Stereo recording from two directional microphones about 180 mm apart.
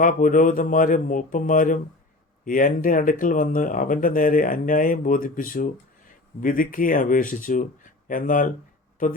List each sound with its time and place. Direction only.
0.0 s speech: 45° left (ahead or behind)